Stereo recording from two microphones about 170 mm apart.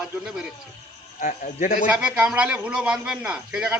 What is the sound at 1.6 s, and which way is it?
Speech, 55° left (ahead or behind).